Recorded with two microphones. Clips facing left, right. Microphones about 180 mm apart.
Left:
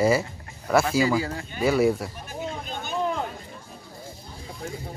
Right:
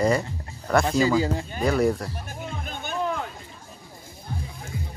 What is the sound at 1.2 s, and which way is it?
Speech, 25° right (ahead or behind).